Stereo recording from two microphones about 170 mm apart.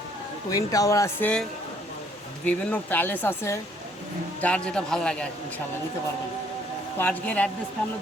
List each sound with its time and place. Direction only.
0.5 s a man's voice: 20° left (ahead or behind)
7.0 s speech: 10° left (ahead or behind)